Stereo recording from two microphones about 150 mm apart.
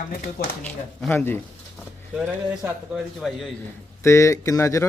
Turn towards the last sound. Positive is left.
turn(degrees=20)  # may be behind; listen again after turning